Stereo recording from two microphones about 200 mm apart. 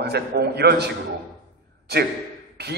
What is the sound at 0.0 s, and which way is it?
Speech, 55° right (ahead or behind).